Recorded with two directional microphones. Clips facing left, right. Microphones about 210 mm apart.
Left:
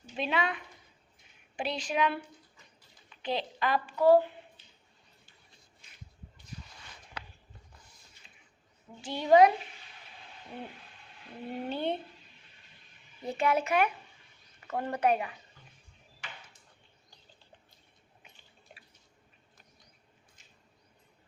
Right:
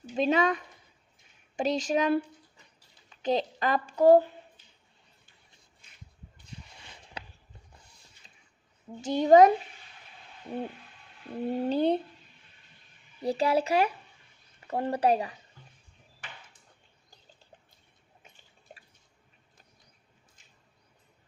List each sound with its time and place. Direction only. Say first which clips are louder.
0.2 s a woman's voice: right 7 dB; 40° right (ahead or behind)
6.4 s a sound: even; 25° right (ahead or behind)
9.0 s speech: right 3 dB; 45° right (ahead or behind)
11.4 s speech: right 7 dB; 40° right (ahead or behind)
13.2 s speech: right 3 dB; 35° right (ahead or behind)
18.7 s drip: right 5 dB; 40° right (ahead or behind)